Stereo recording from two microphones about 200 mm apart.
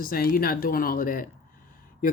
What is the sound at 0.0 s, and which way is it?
Speech, 45° left (ahead or behind).